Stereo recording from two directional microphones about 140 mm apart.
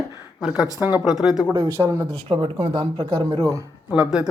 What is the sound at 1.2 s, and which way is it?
Speech, 5° right (ahead or behind).